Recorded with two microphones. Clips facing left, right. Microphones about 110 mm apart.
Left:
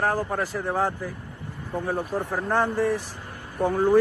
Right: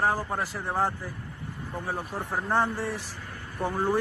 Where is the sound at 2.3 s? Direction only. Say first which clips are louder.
Left 1 dB; 15° right (ahead or behind).